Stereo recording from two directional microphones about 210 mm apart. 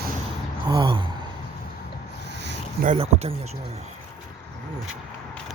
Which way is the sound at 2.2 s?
55° right (ahead or behind).